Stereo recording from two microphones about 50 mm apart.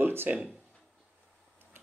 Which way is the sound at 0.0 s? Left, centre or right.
Right.